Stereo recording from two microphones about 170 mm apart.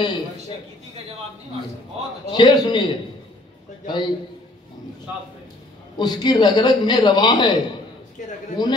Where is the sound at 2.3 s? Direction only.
25° left (ahead or behind).